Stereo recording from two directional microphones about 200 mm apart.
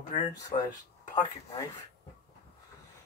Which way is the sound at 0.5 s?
25° left (ahead or behind).